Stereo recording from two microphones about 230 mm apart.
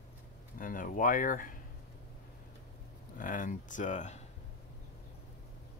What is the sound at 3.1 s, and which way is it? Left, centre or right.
Speech, left.